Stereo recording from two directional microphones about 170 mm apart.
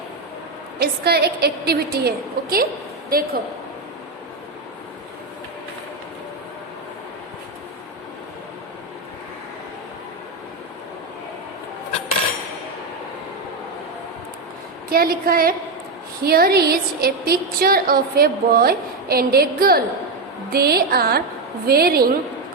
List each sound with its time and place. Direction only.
0.8 s a woman's voice: 70° right (ahead or behind)
14.8 s a woman's voice: 60° right (ahead or behind)